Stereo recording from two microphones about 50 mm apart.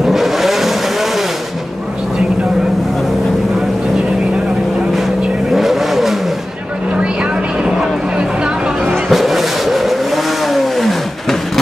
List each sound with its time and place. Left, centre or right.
0.0 s vehicle: centre
5.5 s vehicle: centre
7.6 s a sound: centre
8.8 s vehicle: centre